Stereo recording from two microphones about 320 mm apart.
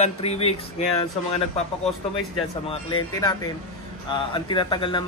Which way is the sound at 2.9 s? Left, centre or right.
Centre.